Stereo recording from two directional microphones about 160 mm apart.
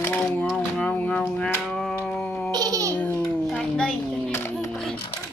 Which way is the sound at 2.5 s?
25° right (ahead or behind).